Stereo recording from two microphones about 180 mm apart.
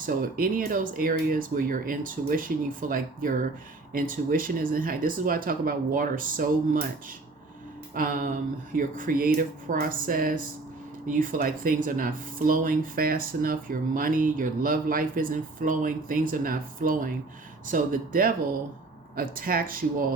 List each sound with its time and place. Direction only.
0.0 s speech: 50° right (ahead or behind)
7.9 s speech: 50° right (ahead or behind)